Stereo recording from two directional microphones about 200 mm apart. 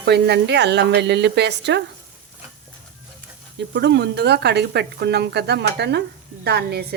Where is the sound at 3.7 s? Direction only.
60° right (ahead or behind).